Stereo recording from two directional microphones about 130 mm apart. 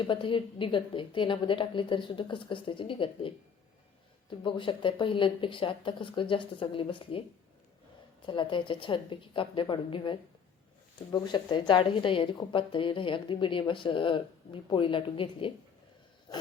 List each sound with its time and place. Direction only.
0.1 s a woman's voice: 40° left (ahead or behind)
8.3 s a woman's voice: 40° left (ahead or behind)